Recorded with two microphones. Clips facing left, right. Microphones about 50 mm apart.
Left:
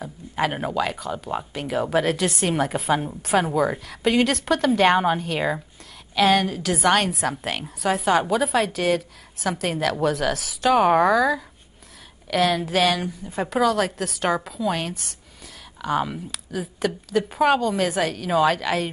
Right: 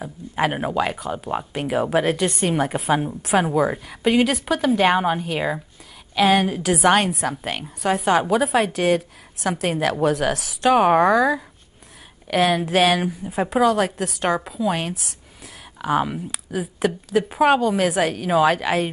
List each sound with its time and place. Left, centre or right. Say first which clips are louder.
0.0 s a woman's voice: right 2 dB; centre